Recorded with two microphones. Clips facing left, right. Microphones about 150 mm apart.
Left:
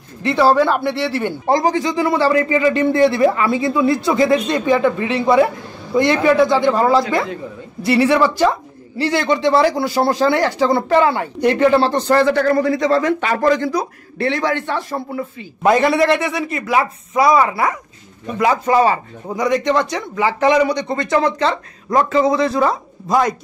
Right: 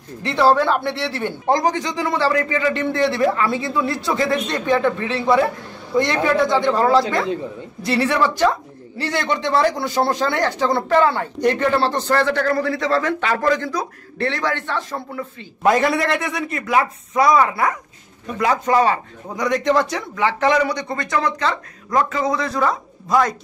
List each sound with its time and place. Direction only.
0.2 s a man's voice: 5° left (ahead or behind)
20.2 s speech: 15° left (ahead or behind)